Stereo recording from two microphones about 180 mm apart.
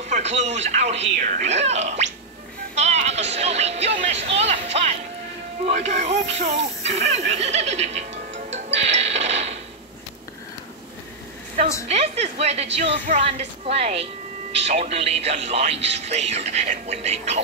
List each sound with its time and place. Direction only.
0.0 s speech: 40° right (ahead or behind)
2.7 s music: 40° right (ahead or behind)
5.7 s speech: 40° right (ahead or behind)
11.9 s speech: 35° right (ahead or behind)